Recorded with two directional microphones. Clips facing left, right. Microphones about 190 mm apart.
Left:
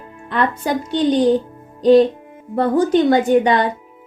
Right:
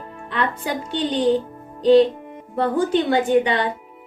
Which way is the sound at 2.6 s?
40° left (ahead or behind).